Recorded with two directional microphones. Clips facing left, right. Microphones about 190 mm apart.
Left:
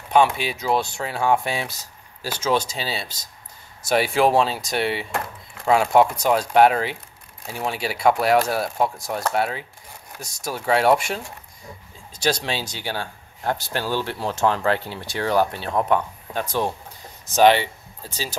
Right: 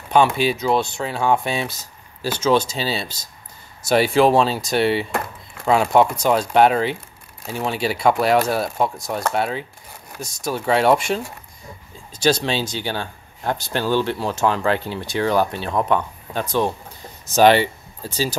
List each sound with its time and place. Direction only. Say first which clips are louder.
0.1 s speech: right 2 dB; 30° right (ahead or behind)
17.3 s speech: right 2 dB; 40° right (ahead or behind)